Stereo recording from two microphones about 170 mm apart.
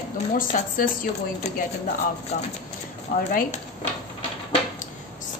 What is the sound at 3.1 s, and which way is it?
Speech, 55° left (ahead or behind).